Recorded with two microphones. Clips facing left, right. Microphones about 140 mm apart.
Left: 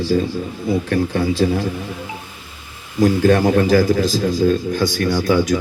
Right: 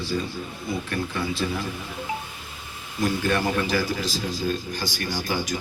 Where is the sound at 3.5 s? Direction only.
45° left (ahead or behind).